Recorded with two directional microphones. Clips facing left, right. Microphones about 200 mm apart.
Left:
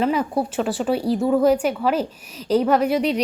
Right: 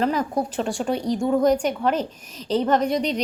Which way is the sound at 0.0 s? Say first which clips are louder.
Left 2 dB; 5° left (ahead or behind).